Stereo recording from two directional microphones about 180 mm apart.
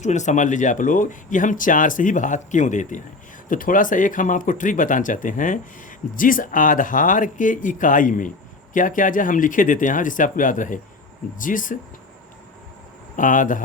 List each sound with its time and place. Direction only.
0.0 s speech: 40° left (ahead or behind)
13.1 s speech: 45° left (ahead or behind)